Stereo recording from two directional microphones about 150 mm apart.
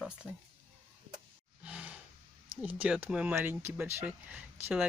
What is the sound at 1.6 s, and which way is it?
Roar, 5° right (ahead or behind).